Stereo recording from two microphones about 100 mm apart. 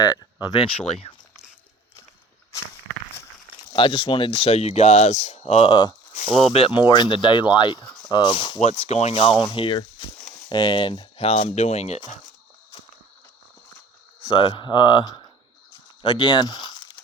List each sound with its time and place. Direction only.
0.2 s speech: 45° left (ahead or behind)
3.8 s speech: 60° left (ahead or behind)
8.7 s speech: 90° left; by 9.4 s 75° left (ahead or behind)
9.6 s speech: 60° left (ahead or behind)
11.2 s speech: 90° left
14.2 s speech: 55° left (ahead or behind)